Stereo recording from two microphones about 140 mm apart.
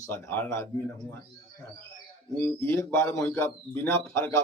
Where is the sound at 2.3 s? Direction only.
15° left (ahead or behind).